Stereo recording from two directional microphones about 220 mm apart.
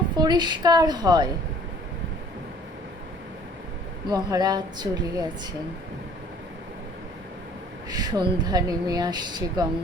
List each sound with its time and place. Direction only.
0.2 s a woman's voice: 20° right (ahead or behind)
4.1 s a woman's voice: 15° right (ahead or behind)
7.9 s a woman's voice: 20° right (ahead or behind)